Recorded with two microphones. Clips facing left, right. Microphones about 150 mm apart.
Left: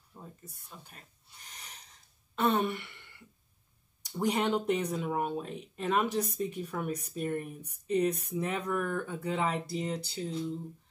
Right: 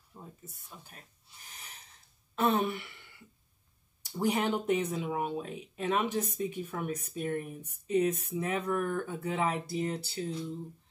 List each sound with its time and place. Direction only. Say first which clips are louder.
0.1 s a sound: even; 10° right (ahead or behind)
2.3 s speech: even; centre (ahead or behind)
4.2 s speech: left 1 dB; centre (ahead or behind)